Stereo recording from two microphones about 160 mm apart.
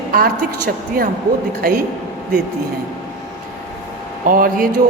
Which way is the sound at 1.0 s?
65° right (ahead or behind).